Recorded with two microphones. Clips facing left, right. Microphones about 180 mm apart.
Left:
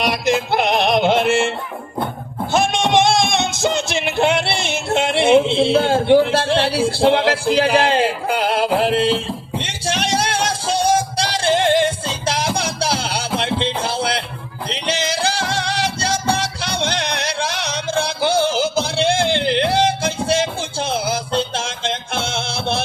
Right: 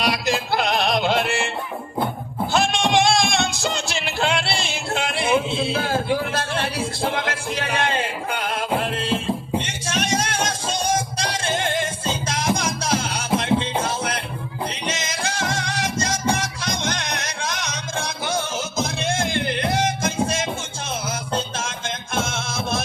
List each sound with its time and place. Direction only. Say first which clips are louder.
0.0 s music: left 4 dB; 20° left (ahead or behind)
2.5 s music: left 3 dB; 20° left (ahead or behind)
5.7 s a man's voice: left 8 dB; 30° left (ahead or behind)
6.1 s music: left 10 dB; 30° left (ahead or behind)